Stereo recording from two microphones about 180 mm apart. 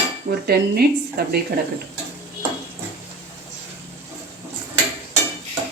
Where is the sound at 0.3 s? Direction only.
60° right (ahead or behind).